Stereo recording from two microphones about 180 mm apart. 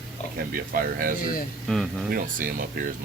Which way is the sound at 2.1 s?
50° right (ahead or behind).